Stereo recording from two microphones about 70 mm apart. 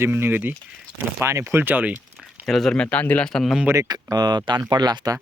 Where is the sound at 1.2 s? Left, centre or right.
Right.